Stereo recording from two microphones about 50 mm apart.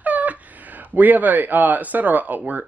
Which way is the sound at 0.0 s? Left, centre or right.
Right.